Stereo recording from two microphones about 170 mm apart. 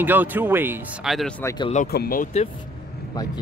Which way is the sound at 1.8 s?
60° left (ahead or behind).